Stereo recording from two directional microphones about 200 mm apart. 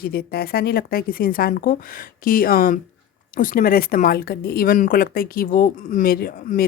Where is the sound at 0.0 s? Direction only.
50° left (ahead or behind).